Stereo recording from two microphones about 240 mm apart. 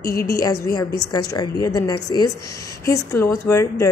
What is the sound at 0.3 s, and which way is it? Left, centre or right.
A woman's voice, centre.